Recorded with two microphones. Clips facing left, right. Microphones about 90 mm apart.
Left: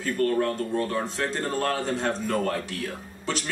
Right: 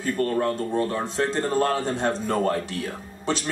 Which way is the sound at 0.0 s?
35° right (ahead or behind).